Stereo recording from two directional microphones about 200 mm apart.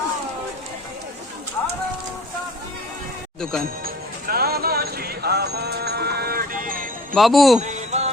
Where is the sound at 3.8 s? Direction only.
50° right (ahead or behind).